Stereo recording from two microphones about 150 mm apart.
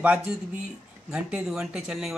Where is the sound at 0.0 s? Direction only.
10° right (ahead or behind).